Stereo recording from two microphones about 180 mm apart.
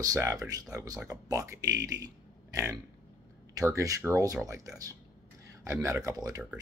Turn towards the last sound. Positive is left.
turn(degrees=-20)  # may be behind; listen again after turning